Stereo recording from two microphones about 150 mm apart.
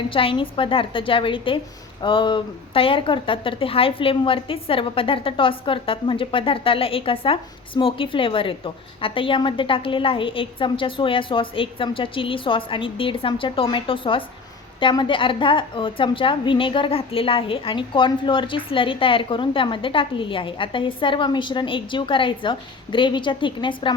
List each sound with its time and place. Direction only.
0.1 s speech: 35° left (ahead or behind)